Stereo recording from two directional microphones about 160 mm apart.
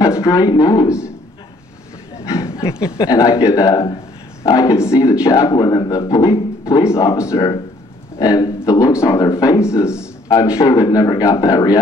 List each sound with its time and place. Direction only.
0.0 s speech: 20° left (ahead or behind)
2.2 s a sound: 20° left (ahead or behind)
3.0 s speech: 20° left (ahead or behind)